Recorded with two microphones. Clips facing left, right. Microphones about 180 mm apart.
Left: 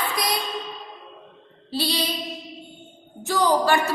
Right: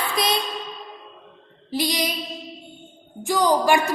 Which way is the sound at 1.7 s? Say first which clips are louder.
Right 2 dB; 15° right (ahead or behind).